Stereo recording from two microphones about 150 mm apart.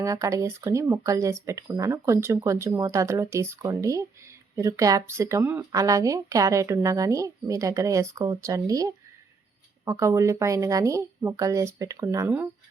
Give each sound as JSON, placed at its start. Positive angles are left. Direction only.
{"t": 0.0, "sound": "speech", "side_deg": -20}